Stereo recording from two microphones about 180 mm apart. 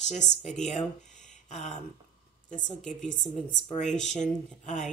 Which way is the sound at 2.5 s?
45° left (ahead or behind).